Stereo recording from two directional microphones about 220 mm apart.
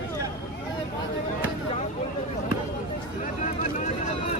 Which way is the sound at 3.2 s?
35° left (ahead or behind).